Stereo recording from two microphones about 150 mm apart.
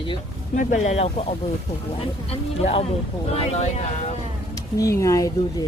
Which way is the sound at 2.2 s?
40° left (ahead or behind).